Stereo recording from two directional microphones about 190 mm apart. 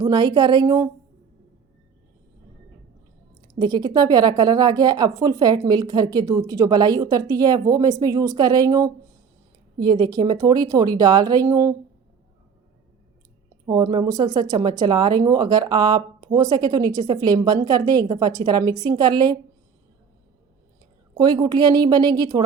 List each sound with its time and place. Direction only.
0.0 s speech: 20° right (ahead or behind)
3.6 s speech: 20° right (ahead or behind)
13.7 s speech: 20° right (ahead or behind)
21.2 s speech: 20° right (ahead or behind)